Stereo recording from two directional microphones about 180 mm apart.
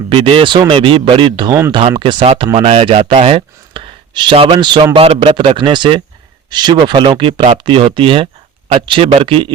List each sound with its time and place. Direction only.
0.1 s speech: 30° right (ahead or behind)